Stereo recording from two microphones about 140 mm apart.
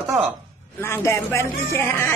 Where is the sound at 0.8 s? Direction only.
20° left (ahead or behind).